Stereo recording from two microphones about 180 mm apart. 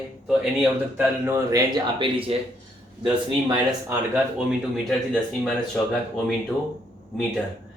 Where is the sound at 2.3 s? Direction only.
35° right (ahead or behind).